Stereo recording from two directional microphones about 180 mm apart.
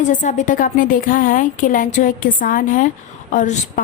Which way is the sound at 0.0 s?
45° left (ahead or behind).